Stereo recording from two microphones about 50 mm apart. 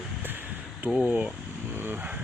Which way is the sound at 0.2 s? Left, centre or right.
Right.